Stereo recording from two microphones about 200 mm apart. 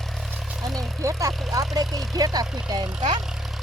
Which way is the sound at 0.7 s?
15° right (ahead or behind).